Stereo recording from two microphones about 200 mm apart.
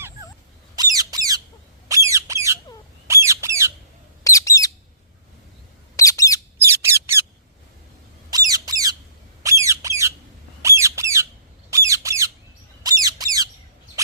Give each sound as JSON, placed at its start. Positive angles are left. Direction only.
{"t": 0.8, "sound": "squawk", "side_deg": -20}
{"t": 4.2, "sound": "bird", "side_deg": 15}
{"t": 6.0, "sound": "bird", "side_deg": 15}
{"t": 6.8, "sound": "bird", "side_deg": -15}
{"t": 8.3, "sound": "squawk", "side_deg": -20}